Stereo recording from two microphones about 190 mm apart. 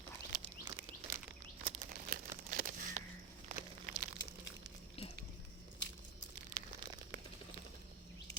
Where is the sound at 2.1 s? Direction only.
45° right (ahead or behind).